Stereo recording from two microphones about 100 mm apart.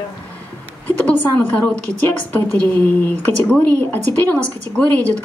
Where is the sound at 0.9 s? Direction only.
15° left (ahead or behind).